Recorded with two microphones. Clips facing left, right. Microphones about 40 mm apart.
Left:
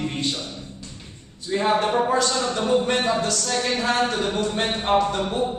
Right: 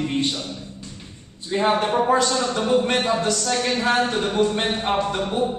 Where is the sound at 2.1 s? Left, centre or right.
Right.